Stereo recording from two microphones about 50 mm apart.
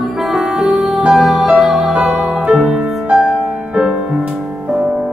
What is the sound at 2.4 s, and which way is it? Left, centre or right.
Music, right.